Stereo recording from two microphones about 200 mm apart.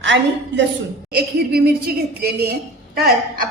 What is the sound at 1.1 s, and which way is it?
A woman's voice, 50° right (ahead or behind).